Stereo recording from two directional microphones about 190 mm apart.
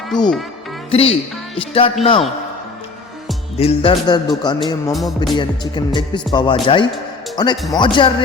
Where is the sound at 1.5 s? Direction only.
30° left (ahead or behind).